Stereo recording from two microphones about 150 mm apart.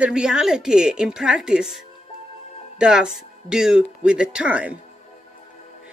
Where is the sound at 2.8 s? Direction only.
5° right (ahead or behind).